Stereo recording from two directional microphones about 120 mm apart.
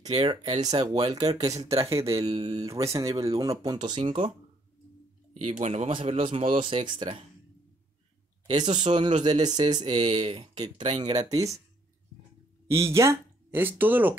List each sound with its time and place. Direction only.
0.0 s speech: 60° right (ahead or behind)
0.3 s speech: 50° right (ahead or behind)
0.6 s speech: 65° right (ahead or behind)
0.8 s speech: 35° right (ahead or behind)
2.1 s speech: 55° right (ahead or behind)
2.6 s speech: 25° right (ahead or behind)
4.0 s speech: 55° right (ahead or behind)
5.3 s speech: 70° right (ahead or behind)
6.0 s speech: 55° right (ahead or behind)
8.7 s speech: 45° right (ahead or behind)
9.9 s speech: 65° right (ahead or behind)
11.0 s speech: 35° right (ahead or behind)
12.6 s speech: 25° right (ahead or behind)